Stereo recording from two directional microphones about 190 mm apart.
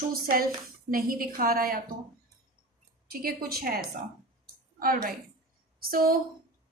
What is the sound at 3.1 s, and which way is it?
A woman's voice, 50° right (ahead or behind).